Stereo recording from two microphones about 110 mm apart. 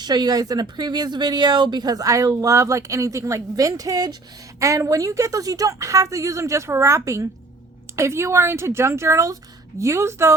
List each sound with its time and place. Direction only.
0.0 s a woman's voice: 40° right (ahead or behind)